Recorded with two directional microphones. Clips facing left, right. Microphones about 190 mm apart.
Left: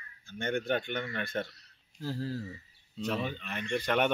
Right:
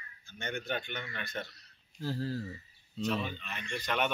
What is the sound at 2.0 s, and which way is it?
Speech, 10° left (ahead or behind).